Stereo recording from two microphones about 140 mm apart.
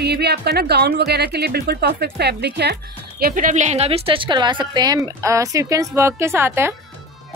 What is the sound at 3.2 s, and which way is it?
A woman's voice, 70° right (ahead or behind).